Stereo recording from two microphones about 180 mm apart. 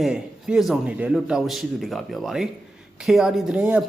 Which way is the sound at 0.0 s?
5° right (ahead or behind).